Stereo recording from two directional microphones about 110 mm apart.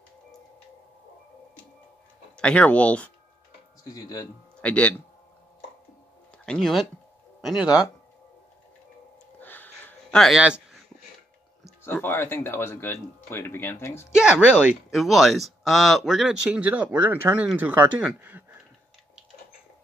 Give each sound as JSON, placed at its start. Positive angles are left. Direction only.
{"t": 2.3, "sound": "speech", "side_deg": 10}
{"t": 3.9, "sound": "speech", "side_deg": 35}
{"t": 4.6, "sound": "speech", "side_deg": 10}
{"t": 6.3, "sound": "speech", "side_deg": 5}
{"t": 9.4, "sound": "a sound", "side_deg": 15}
{"t": 10.1, "sound": "speech", "side_deg": 0}
{"t": 11.6, "sound": "speech", "side_deg": 20}
{"t": 14.1, "sound": "speech", "side_deg": -10}
{"t": 18.2, "sound": "a sound", "side_deg": -20}